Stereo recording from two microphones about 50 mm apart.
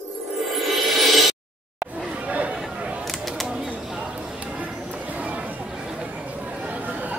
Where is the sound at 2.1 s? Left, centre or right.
Right.